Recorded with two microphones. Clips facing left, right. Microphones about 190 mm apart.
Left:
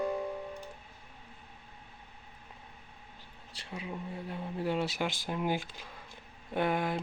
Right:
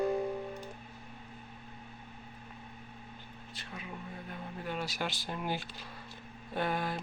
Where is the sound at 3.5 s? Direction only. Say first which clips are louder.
Left 4 dB; 30° left (ahead or behind).